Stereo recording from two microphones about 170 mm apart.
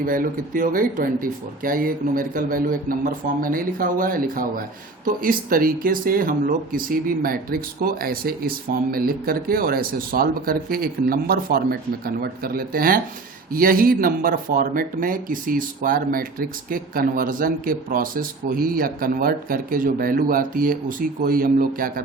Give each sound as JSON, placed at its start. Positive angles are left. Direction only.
{"t": 0.0, "sound": "speech", "side_deg": -55}